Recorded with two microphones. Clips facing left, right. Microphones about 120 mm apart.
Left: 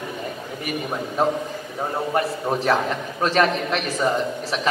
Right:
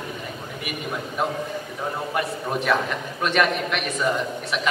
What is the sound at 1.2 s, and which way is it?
A man's voice, 35° left (ahead or behind).